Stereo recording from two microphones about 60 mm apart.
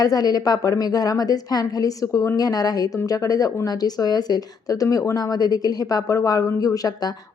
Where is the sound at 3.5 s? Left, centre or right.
Left.